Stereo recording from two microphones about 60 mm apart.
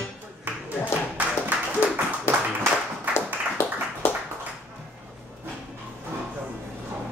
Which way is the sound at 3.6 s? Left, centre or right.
Left.